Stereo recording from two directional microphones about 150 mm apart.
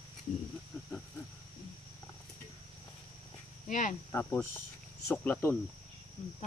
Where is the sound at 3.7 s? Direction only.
55° left (ahead or behind).